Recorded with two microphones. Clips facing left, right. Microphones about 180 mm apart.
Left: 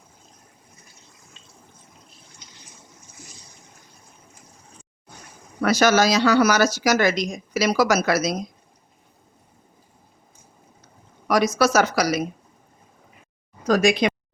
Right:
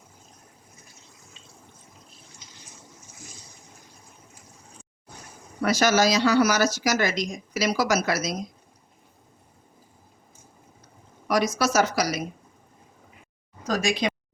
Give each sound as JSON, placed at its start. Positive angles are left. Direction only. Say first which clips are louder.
{"t": 5.6, "sound": "speech", "louder": "left 3 dB", "side_deg": 65}
{"t": 11.3, "sound": "speech", "louder": "left 4 dB", "side_deg": 70}
{"t": 13.7, "sound": "speech", "louder": "left 7 dB", "side_deg": 65}